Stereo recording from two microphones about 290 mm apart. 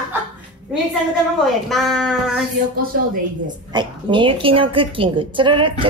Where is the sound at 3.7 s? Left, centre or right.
Centre.